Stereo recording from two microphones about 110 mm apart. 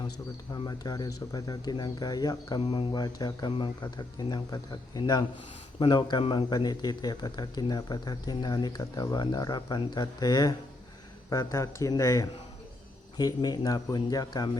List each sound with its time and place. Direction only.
0.5 s speech: 35° left (ahead or behind)